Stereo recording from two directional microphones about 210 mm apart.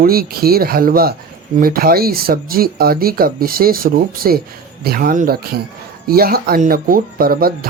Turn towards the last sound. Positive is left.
turn(degrees=-45)  # may be behind; listen again after turning